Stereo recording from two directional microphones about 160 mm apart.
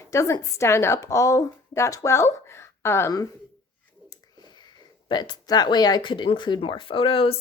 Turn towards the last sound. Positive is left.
turn(degrees=35)  # may be behind; listen again after turning